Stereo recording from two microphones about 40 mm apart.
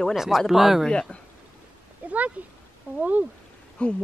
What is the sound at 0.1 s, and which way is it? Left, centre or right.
Speech, centre.